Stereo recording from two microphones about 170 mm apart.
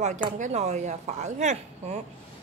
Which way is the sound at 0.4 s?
40° right (ahead or behind).